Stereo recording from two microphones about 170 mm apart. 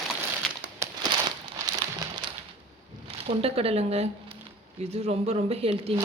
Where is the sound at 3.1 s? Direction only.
35° right (ahead or behind).